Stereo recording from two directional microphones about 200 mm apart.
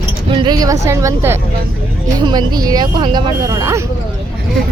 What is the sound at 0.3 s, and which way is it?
A woman's voice, 20° right (ahead or behind).